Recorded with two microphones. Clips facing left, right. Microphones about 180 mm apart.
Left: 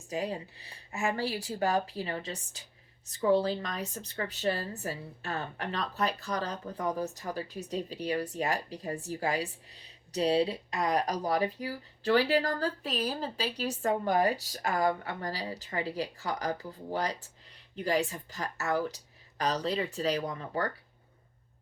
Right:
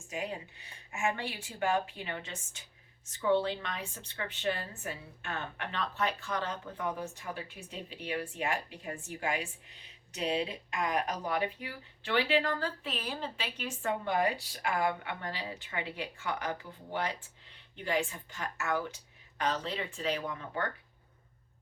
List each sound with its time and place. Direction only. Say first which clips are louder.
0.1 s a woman's voice: left 4 dB; 35° left (ahead or behind)